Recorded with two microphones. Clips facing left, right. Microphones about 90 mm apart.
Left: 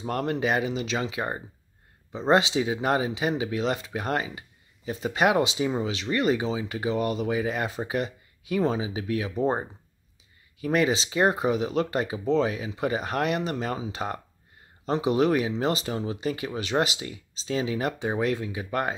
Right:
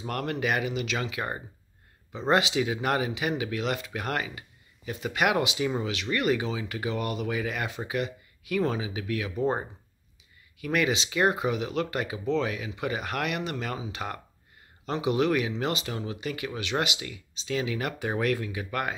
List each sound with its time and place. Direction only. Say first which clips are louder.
0.0 s speech: left 3 dB; 30° left (ahead or behind)